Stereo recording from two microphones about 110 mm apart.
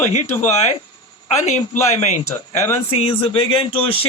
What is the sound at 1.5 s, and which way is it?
Speech, 90° left.